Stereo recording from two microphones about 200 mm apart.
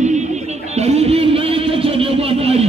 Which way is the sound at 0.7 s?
35° right (ahead or behind).